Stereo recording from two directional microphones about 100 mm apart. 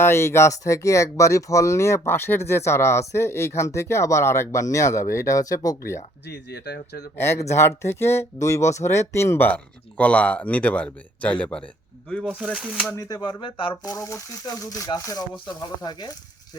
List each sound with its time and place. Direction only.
0.0 s speech: 25° left (ahead or behind)
7.2 s speech: 30° left (ahead or behind); by 12.3 s 10° left (ahead or behind)
12.5 s speech: 10° right (ahead or behind)
12.9 s speech: 35° left (ahead or behind)
13.4 s speech: 65° left (ahead or behind)
13.8 s speech: 30° left (ahead or behind)